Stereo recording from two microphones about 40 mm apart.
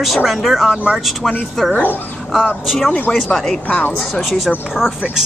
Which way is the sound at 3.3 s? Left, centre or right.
Centre.